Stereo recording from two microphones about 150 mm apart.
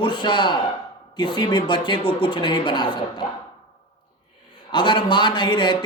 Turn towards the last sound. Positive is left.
turn(degrees=30)  # may be behind; listen again after turning